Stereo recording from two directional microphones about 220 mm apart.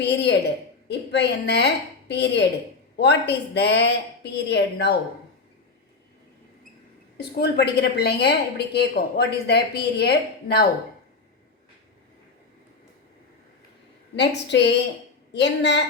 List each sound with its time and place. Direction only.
0.0 s a woman's voice: 50° left (ahead or behind)
7.3 s a woman's voice: 45° left (ahead or behind)
14.2 s a woman's voice: 50° left (ahead or behind)